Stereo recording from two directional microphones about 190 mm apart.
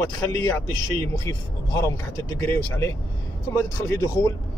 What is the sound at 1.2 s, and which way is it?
Speech, 15° left (ahead or behind).